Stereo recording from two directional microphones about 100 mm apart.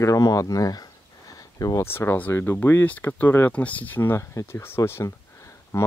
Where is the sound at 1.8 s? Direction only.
25° left (ahead or behind).